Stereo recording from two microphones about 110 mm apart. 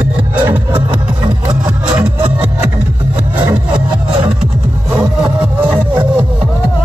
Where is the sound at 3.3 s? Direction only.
50° right (ahead or behind).